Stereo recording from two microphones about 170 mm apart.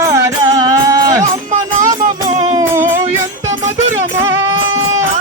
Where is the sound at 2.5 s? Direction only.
15° right (ahead or behind).